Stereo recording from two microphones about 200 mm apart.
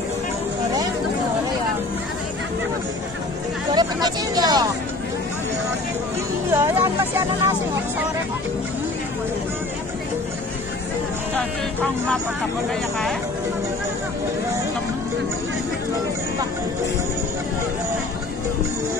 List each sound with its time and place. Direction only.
3.7 s vehicle: 20° right (ahead or behind)
6.5 s speech: 10° right (ahead or behind)
11.3 s speech: 5° left (ahead or behind)